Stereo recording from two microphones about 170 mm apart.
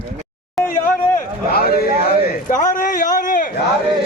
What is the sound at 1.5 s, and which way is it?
Speech, 65° left (ahead or behind).